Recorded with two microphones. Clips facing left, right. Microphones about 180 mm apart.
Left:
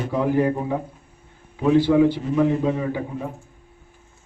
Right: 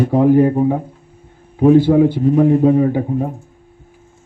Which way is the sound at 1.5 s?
45° right (ahead or behind).